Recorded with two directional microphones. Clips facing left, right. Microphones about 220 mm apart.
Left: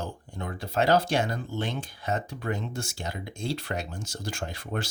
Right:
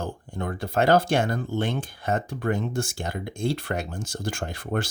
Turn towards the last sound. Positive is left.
turn(degrees=-50)  # may be behind; listen again after turning